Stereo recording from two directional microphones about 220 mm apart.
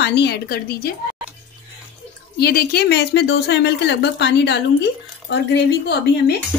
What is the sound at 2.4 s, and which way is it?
A woman's voice, 45° left (ahead or behind).